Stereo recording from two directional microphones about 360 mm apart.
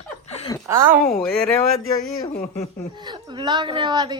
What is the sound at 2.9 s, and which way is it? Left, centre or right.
A woman's voice, centre.